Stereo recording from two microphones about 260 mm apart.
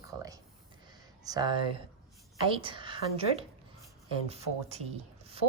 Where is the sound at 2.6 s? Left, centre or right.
Centre.